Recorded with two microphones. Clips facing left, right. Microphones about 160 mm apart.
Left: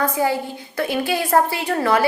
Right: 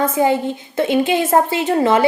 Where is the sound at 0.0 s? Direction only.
20° right (ahead or behind).